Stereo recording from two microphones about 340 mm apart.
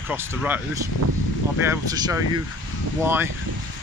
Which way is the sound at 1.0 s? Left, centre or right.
Right.